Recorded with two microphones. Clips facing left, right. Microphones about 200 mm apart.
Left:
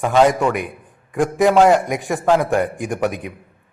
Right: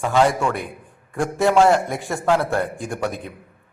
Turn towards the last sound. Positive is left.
turn(degrees=15)  # may be behind; listen again after turning